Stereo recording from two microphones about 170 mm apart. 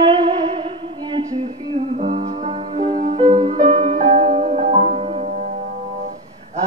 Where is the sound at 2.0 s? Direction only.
55° right (ahead or behind).